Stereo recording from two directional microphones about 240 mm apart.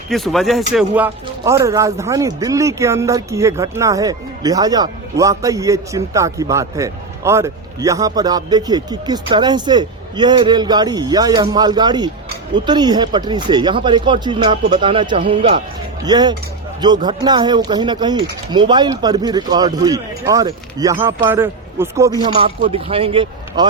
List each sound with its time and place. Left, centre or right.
0.1 s speech: centre
22.2 s speech: right